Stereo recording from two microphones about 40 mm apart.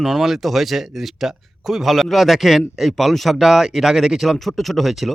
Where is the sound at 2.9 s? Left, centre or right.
Centre.